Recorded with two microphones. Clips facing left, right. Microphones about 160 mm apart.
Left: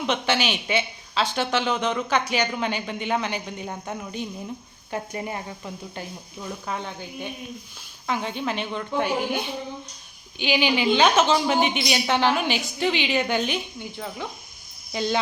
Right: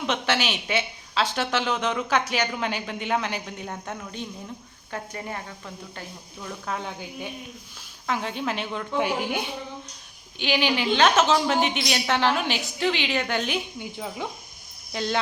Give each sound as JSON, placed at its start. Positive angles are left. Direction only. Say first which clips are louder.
{"t": 0.0, "sound": "speech", "louder": "left 2 dB", "side_deg": 0}
{"t": 6.7, "sound": "speech", "louder": "right 2 dB", "side_deg": -5}
{"t": 10.3, "sound": "speech", "louder": "left 2 dB", "side_deg": 0}
{"t": 13.9, "sound": "speech", "louder": "right 1 dB", "side_deg": -15}
{"t": 14.9, "sound": "speech", "louder": "left 2 dB", "side_deg": 0}